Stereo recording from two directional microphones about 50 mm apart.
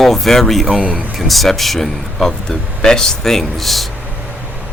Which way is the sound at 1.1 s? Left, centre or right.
Centre.